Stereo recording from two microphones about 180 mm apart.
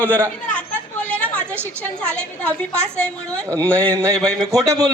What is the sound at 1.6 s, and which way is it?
A woman's voice, 10° left (ahead or behind).